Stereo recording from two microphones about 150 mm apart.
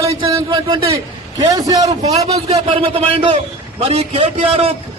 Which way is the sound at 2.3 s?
40° right (ahead or behind).